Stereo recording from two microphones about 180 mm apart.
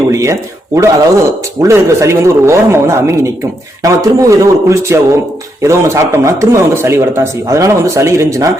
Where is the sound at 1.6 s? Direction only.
15° right (ahead or behind).